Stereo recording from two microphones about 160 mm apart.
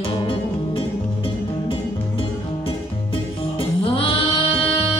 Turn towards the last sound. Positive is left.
turn(degrees=35)  # may be behind; listen again after turning